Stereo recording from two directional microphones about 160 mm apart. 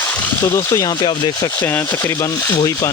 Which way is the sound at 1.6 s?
10° left (ahead or behind).